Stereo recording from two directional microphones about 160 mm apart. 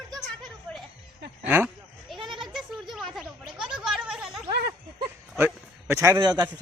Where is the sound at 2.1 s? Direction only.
Centre (ahead or behind).